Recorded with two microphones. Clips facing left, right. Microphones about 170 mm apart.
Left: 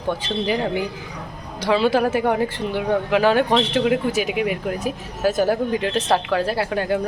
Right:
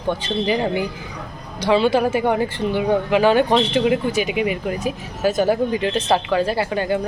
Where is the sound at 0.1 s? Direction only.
Centre (ahead or behind).